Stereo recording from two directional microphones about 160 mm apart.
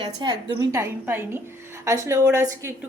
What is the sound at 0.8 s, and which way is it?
A woman's voice, 15° right (ahead or behind).